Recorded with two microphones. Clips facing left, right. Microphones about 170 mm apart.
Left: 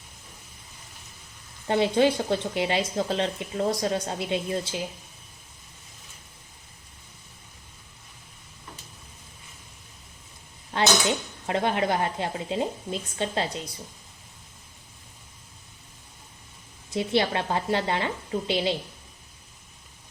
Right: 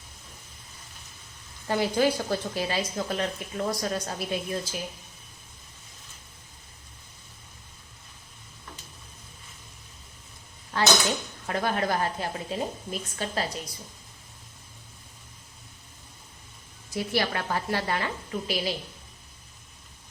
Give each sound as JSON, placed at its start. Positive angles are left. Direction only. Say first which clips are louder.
{"t": 1.6, "sound": "a woman's voice", "louder": "left 3 dB", "side_deg": 25}
{"t": 11.4, "sound": "a woman's voice", "louder": "left 3 dB", "side_deg": 20}
{"t": 16.9, "sound": "a woman's voice", "louder": "left 3 dB", "side_deg": 25}